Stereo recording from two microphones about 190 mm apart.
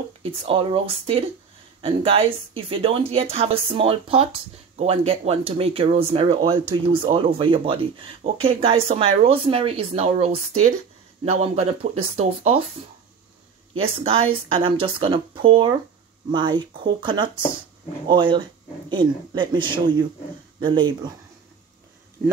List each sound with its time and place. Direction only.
0.2 s speech: 30° right (ahead or behind)
13.7 s speech: 30° right (ahead or behind)